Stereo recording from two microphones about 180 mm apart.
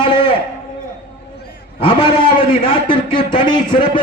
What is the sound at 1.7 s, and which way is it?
A man's voice, 25° left (ahead or behind).